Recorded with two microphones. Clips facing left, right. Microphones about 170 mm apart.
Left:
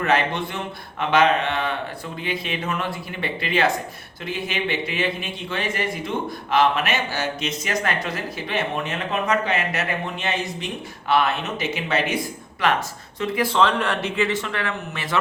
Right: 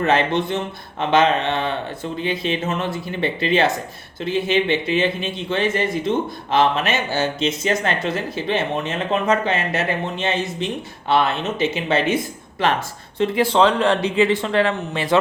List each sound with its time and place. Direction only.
0.0 s speech: 25° right (ahead or behind)